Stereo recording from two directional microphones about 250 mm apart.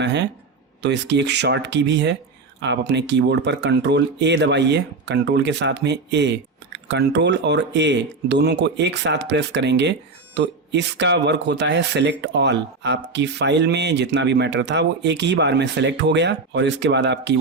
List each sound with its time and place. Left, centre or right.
0.0 s speech: right